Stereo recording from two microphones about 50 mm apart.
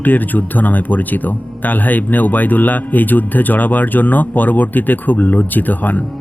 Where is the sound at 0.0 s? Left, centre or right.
Left.